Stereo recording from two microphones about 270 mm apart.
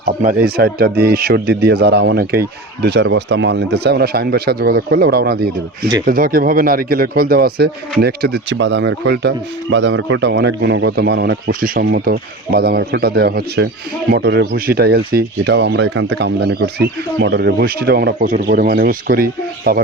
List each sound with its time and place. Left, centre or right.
0.0 s speech: right